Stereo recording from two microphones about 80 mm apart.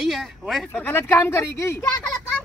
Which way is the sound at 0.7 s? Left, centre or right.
Left.